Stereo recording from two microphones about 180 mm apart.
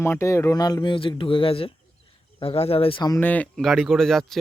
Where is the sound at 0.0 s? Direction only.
15° left (ahead or behind).